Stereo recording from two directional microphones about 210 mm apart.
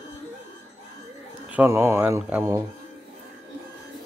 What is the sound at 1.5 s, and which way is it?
Speech, 10° right (ahead or behind).